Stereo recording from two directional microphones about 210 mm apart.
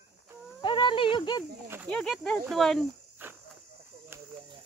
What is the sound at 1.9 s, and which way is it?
Speech, 5° left (ahead or behind).